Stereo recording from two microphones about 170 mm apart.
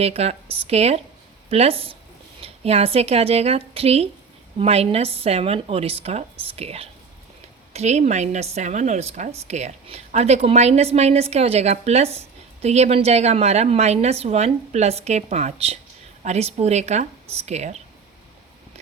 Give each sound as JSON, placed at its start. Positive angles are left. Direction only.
{"t": 0.0, "sound": "a woman's voice", "side_deg": -35}